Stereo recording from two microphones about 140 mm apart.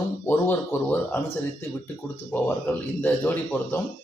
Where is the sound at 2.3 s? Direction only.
10° left (ahead or behind).